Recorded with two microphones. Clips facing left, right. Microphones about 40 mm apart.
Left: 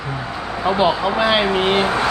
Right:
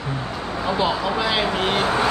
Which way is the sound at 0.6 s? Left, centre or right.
Centre.